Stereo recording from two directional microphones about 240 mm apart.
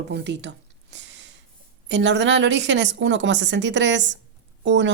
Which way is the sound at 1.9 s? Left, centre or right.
Right.